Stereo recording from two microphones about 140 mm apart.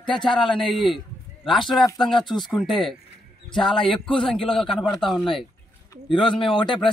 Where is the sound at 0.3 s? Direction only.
35° left (ahead or behind).